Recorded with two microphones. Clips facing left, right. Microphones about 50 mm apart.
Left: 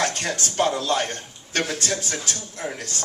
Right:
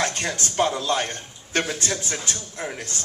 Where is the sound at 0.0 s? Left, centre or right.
Right.